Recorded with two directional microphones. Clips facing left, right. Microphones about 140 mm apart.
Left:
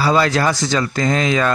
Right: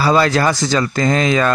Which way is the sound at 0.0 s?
45° right (ahead or behind).